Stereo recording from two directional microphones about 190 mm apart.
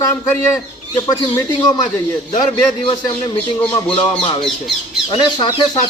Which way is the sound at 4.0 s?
25° left (ahead or behind).